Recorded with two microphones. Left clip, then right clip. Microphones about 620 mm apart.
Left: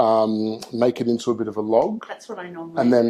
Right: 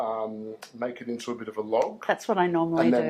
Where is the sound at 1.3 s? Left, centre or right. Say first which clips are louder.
Left 11 dB; left.